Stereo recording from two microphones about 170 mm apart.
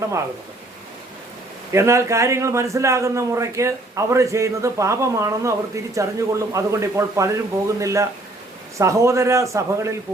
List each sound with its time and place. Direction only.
1.7 s a man's voice: 15° right (ahead or behind)